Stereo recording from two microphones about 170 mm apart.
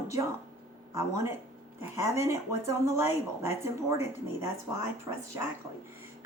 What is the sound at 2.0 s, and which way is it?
Speech, 15° right (ahead or behind).